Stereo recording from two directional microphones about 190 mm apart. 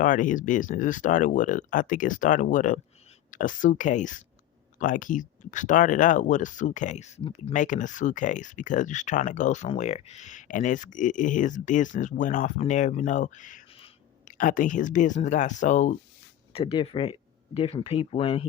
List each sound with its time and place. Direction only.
0.0 s speech: 45° left (ahead or behind); by 18.4 s 30° left (ahead or behind)